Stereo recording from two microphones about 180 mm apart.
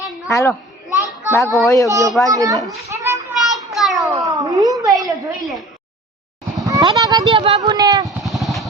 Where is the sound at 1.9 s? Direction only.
20° right (ahead or behind).